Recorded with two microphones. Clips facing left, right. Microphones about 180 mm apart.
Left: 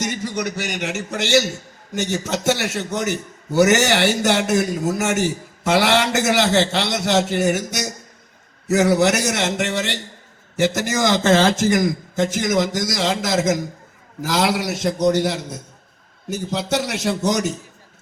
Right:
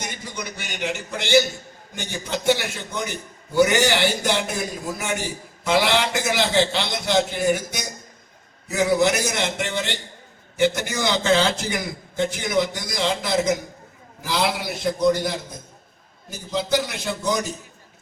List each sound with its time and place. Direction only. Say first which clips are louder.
0.0 s a man's voice: left 9 dB; 80° left
10.6 s a man's voice: left 2 dB; 45° left (ahead or behind)
12.5 s a man's voice: even; 80° left